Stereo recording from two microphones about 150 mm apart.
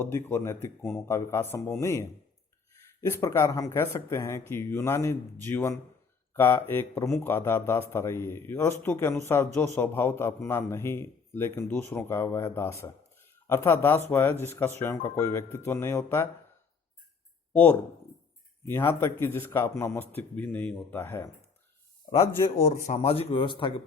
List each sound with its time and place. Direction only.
0.0 s a man's voice: 15° left (ahead or behind)
17.5 s a man's voice: 10° left (ahead or behind)
22.6 s speech: 45° left (ahead or behind)